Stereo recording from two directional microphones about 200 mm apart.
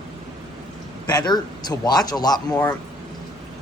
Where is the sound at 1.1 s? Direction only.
20° left (ahead or behind).